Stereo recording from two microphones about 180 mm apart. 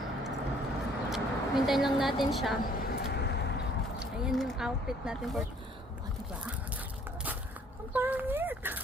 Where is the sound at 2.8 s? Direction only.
60° left (ahead or behind).